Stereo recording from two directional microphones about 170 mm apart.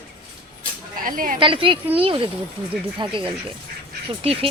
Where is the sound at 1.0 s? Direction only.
55° right (ahead or behind).